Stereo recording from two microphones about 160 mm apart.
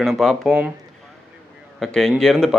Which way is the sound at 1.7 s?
5° left (ahead or behind).